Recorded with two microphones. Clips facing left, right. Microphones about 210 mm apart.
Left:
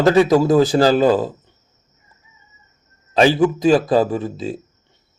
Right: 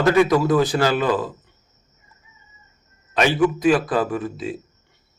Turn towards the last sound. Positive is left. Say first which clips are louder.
# left 5 dB
turn(degrees=25)  # may be behind; listen again after turning